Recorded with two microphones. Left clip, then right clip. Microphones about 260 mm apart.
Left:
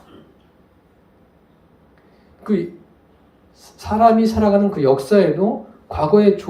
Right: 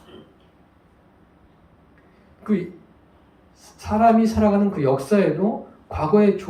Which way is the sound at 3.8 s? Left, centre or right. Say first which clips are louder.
Left 3 dB; left.